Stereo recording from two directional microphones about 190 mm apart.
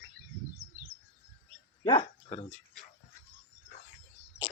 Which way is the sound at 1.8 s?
25° left (ahead or behind).